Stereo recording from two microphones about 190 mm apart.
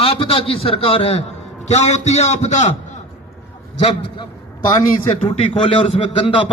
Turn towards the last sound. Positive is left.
turn(degrees=25)  # may be behind; listen again after turning